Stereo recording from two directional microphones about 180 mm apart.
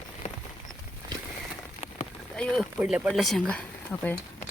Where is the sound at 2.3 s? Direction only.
5° left (ahead or behind).